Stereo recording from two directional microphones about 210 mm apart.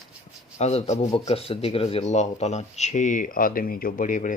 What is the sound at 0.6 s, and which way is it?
Speech, 30° left (ahead or behind).